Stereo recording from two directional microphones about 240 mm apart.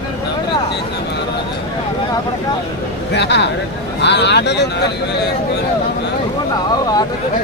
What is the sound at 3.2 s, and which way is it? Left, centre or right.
Speech, left.